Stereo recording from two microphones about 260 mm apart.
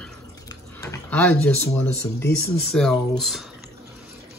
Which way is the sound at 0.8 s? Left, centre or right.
Centre.